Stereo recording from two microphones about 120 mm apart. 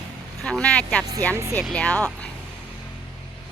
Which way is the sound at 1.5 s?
5° left (ahead or behind).